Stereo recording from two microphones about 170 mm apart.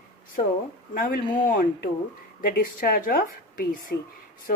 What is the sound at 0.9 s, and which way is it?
A woman's voice, 60° left (ahead or behind).